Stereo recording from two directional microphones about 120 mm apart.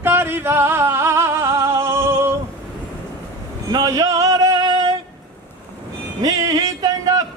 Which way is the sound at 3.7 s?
30° right (ahead or behind).